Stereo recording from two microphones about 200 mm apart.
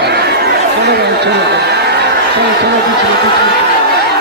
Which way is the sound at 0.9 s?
55° right (ahead or behind).